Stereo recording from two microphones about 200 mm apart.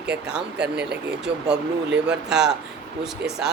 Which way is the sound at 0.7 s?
55° right (ahead or behind).